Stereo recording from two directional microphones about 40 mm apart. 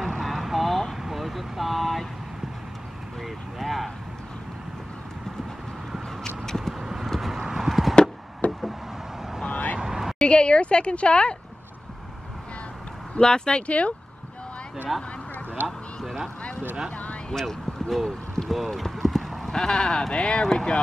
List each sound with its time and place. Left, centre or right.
0.0 s vehicle: centre
3.5 s vehicle: centre
6.2 s vehicle: centre
6.8 s a sound: centre
7.2 s clip-clop: centre
8.4 s knock: left
9.8 s a sound: centre
10.2 s a woman's voice: left
13.2 s a woman's voice: left
14.9 s speech: centre
16.9 s vehicle: left
17.3 s basketball bounce: centre
18.5 s a woman's voice: centre; by 20.8 s left